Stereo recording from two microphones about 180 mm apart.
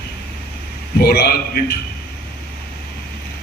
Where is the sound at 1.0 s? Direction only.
60° left (ahead or behind).